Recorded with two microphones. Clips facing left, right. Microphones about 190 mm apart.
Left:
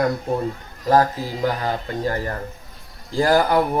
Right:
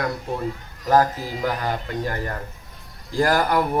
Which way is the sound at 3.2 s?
25° left (ahead or behind).